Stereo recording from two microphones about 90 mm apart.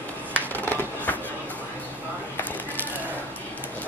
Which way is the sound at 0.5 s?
20° left (ahead or behind).